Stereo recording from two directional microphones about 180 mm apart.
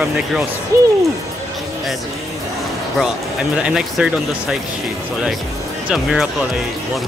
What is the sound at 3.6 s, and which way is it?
Speech, 5° right (ahead or behind).